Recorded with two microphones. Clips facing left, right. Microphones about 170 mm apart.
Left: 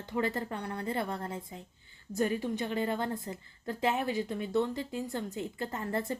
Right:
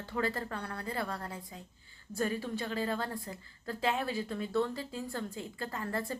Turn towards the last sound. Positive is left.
turn(degrees=20)  # may be behind; listen again after turning